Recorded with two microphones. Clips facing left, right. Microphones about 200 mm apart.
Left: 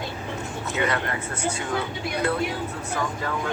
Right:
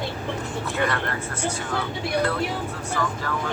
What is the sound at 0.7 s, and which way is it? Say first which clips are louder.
Speech: left 1 dB; 20° left (ahead or behind).